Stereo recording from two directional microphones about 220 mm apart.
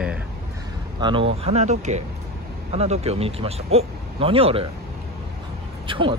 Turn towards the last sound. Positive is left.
turn(degrees=-25)  # may be behind; listen again after turning